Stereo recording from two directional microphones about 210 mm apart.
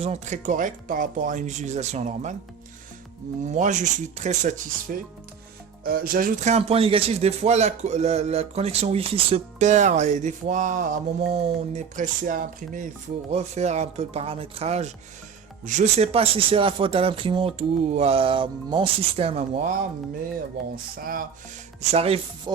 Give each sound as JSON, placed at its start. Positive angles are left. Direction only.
{"t": 0.0, "sound": "speech", "side_deg": -35}
{"t": 3.4, "sound": "speech", "side_deg": -35}
{"t": 21.0, "sound": "speech", "side_deg": -45}
{"t": 21.8, "sound": "speech", "side_deg": -30}